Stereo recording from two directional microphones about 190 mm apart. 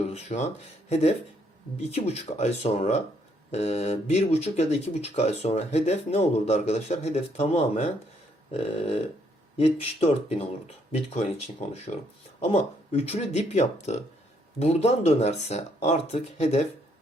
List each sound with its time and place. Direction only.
0.1 s speech: 35° left (ahead or behind)
9.6 s speech: 30° left (ahead or behind)